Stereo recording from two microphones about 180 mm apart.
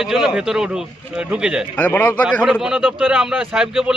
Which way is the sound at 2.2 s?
Centre (ahead or behind).